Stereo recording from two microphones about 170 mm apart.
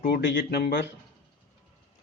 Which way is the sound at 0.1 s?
90° left.